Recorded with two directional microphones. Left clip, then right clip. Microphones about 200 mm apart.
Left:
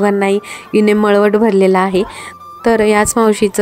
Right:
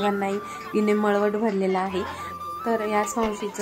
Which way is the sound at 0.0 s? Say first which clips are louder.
Left 12 dB; 50° left (ahead or behind).